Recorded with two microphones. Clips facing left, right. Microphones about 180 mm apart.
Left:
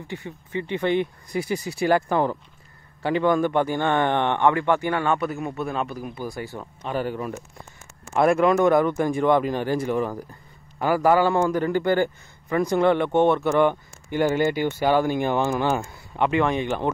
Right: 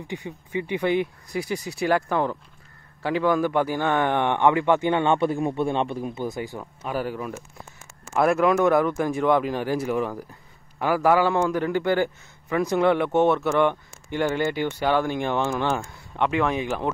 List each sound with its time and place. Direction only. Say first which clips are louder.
0.1 s a man's voice: right 1 dB; 15° right (ahead or behind)
6.6 s a man's voice: left 3 dB; 5° right (ahead or behind)